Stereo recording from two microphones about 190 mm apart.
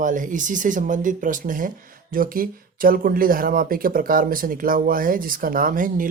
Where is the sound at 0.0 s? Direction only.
45° right (ahead or behind).